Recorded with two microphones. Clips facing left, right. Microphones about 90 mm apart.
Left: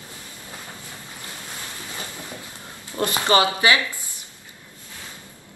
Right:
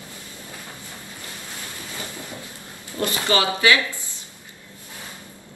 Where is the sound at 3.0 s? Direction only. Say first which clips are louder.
Left 3 dB; 25° left (ahead or behind).